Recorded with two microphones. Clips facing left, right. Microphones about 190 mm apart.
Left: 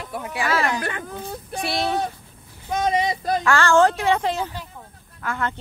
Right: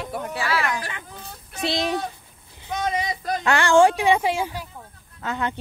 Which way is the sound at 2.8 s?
25° left (ahead or behind).